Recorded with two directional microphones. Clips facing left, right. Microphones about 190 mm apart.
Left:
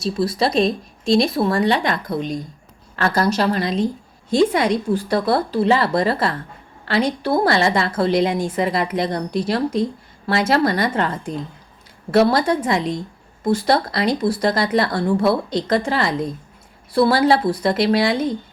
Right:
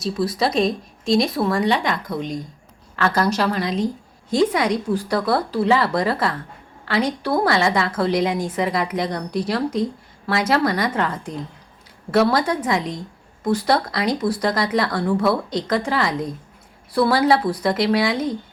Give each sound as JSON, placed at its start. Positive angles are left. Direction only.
{"t": 0.0, "sound": "a woman's voice", "side_deg": 30}
{"t": 12.1, "sound": "a woman's voice", "side_deg": 25}